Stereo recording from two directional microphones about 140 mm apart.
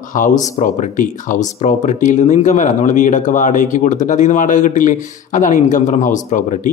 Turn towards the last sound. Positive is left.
turn(degrees=65)  # may be behind; listen again after turning